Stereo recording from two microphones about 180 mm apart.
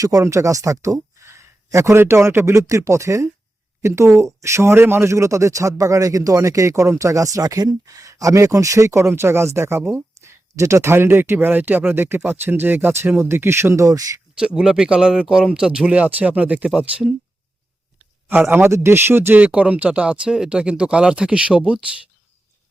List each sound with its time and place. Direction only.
0.0 s speech: 20° right (ahead or behind)
14.3 s speech: 5° right (ahead or behind)